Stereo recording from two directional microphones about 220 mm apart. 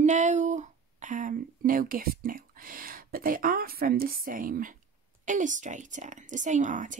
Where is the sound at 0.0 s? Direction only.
35° right (ahead or behind).